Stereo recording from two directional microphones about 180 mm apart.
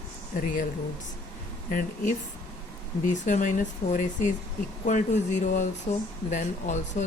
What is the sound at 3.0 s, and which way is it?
Speech, 45° left (ahead or behind).